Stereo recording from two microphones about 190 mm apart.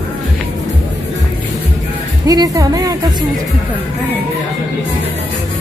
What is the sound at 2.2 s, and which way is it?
Speech, 20° right (ahead or behind).